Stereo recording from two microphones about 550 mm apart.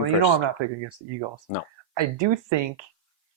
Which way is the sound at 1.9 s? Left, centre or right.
Right.